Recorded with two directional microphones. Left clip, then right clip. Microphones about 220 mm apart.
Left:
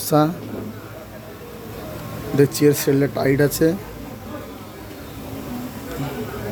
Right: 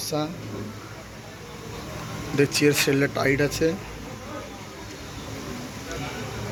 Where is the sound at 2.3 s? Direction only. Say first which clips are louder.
Left 4 dB; 15° left (ahead or behind).